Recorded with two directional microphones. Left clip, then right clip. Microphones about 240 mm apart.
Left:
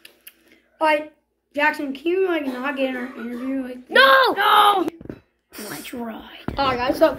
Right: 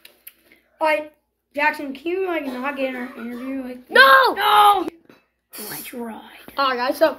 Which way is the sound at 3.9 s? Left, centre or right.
Centre.